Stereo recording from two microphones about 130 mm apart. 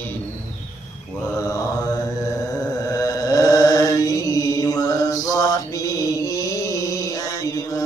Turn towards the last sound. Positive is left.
turn(degrees=25)  # may be behind; listen again after turning